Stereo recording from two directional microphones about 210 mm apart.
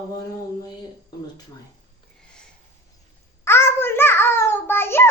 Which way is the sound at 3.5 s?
10° left (ahead or behind).